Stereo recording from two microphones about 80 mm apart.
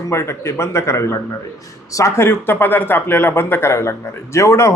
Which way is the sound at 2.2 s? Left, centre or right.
Left.